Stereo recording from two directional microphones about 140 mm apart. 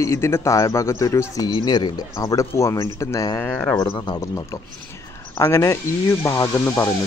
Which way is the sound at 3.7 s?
35° left (ahead or behind).